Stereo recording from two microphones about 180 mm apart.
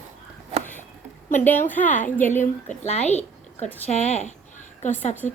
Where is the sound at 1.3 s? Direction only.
10° left (ahead or behind).